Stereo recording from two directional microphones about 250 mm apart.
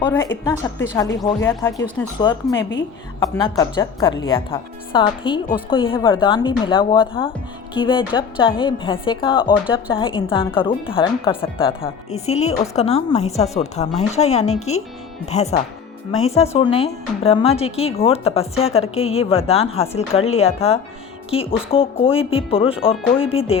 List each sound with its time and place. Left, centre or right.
0.0 s a woman's voice: centre
2.6 s a woman's voice: left
3.2 s speech: centre